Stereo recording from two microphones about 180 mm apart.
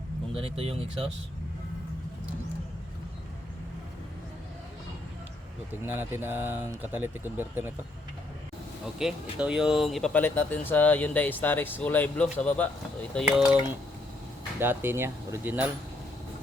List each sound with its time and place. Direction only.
0.3 s speech: 30° right (ahead or behind)
5.8 s speech: 10° right (ahead or behind)
8.8 s speech: 5° right (ahead or behind)
13.2 s cutlery: 5° right (ahead or behind)
14.6 s speech: 10° right (ahead or behind)